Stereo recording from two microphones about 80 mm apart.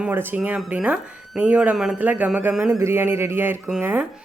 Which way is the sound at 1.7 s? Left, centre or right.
Centre.